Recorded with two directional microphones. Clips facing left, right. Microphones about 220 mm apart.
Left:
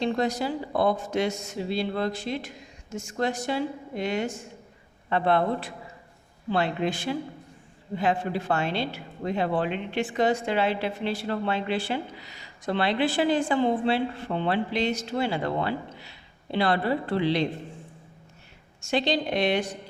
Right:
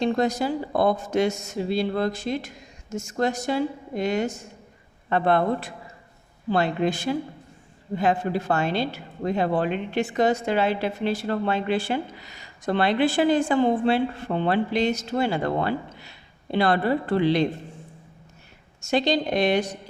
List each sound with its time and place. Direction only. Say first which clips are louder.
0.0 s speech: right 3 dB; 45° right (ahead or behind)
18.8 s a woman's voice: right 3 dB; 40° right (ahead or behind)